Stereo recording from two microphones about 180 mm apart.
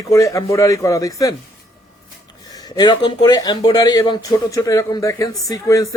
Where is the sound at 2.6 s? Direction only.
25° left (ahead or behind).